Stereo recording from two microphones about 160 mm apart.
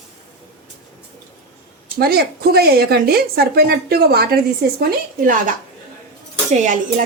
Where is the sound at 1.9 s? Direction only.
75° right (ahead or behind); by 5.5 s 60° right (ahead or behind).